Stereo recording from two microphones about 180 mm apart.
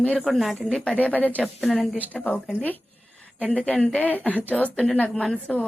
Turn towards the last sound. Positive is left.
turn(degrees=5)  # may be behind; listen again after turning